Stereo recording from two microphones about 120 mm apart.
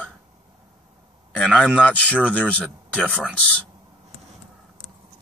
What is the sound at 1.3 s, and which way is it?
Speech, 10° left (ahead or behind).